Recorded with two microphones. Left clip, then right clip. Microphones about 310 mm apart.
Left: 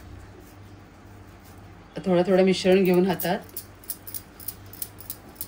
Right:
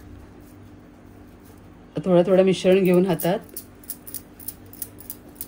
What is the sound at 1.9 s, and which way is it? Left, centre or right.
Speech, right.